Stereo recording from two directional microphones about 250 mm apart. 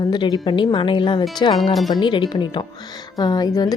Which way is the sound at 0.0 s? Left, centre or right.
Centre.